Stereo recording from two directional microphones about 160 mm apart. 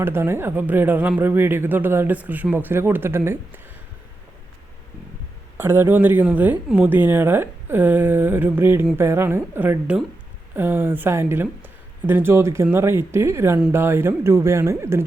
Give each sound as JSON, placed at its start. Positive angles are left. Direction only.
{"t": 0.0, "sound": "speech", "side_deg": -15}
{"t": 5.5, "sound": "speech", "side_deg": -15}